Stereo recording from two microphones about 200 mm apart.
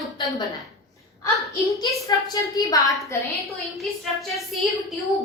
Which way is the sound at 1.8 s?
20° left (ahead or behind).